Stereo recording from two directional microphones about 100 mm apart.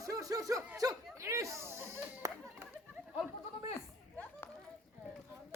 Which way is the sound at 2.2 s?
30° right (ahead or behind).